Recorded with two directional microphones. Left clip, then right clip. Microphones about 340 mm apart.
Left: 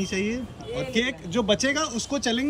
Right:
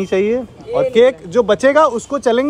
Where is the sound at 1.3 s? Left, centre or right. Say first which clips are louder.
Right 12 dB; centre.